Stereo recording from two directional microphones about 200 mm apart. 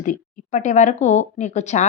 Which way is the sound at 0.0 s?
40° left (ahead or behind).